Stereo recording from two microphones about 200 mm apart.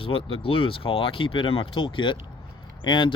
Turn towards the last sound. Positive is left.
turn(degrees=25)  # may be behind; listen again after turning